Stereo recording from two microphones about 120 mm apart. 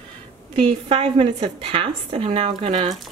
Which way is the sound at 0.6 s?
50° right (ahead or behind).